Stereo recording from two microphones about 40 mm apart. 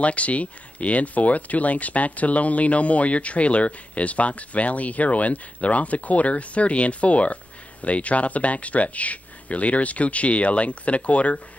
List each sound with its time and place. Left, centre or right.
0.0 s speech: left